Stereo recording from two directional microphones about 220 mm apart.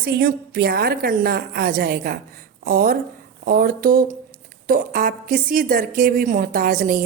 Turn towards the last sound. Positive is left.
turn(degrees=-40)  # may be behind; listen again after turning